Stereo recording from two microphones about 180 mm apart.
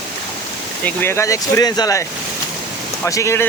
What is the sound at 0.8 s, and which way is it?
Speech, 10° left (ahead or behind).